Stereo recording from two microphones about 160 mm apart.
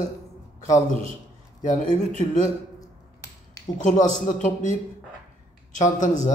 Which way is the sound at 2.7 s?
20° left (ahead or behind).